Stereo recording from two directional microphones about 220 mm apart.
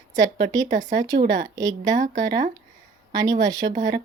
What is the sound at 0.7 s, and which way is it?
Speech, 35° right (ahead or behind).